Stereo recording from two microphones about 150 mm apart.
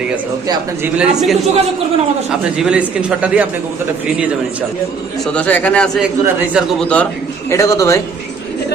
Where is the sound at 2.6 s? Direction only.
5° right (ahead or behind).